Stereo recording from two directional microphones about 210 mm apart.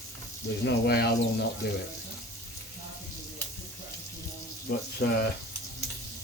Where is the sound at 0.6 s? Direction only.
50° left (ahead or behind).